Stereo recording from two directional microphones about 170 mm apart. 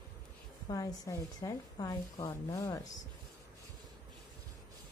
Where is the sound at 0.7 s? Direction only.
20° left (ahead or behind).